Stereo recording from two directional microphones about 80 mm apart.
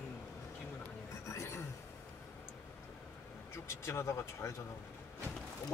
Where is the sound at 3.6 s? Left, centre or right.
Left.